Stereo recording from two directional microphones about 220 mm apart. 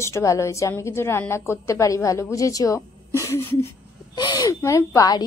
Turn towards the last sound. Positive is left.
turn(degrees=15)  # may be behind; listen again after turning